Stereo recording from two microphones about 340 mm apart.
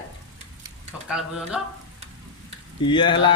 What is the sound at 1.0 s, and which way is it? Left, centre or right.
Speech, centre.